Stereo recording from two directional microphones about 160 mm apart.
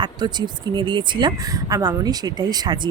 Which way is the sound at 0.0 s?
25° right (ahead or behind).